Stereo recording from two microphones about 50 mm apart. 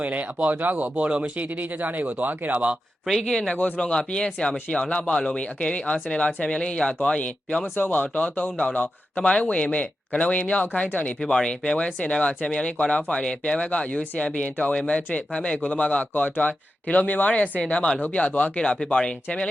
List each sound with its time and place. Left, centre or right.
0.0 s speech: right
1.5 s speech: right
3.1 s speech: centre
3.5 s speech: left
7.8 s speech: left
18.5 s speech: centre